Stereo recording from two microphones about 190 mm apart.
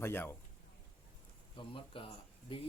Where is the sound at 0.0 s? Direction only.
10° left (ahead or behind).